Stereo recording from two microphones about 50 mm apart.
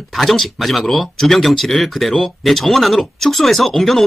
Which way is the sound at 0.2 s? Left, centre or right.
Centre.